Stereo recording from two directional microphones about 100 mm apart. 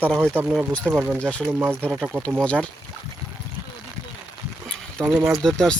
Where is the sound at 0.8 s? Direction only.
25° right (ahead or behind).